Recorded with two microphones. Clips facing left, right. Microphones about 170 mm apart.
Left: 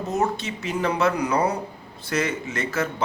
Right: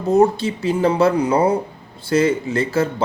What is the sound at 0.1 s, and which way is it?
A man's voice, 30° right (ahead or behind).